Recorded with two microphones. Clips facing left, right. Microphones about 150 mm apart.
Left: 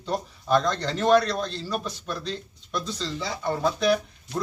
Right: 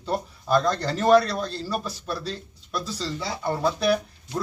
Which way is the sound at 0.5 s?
5° right (ahead or behind).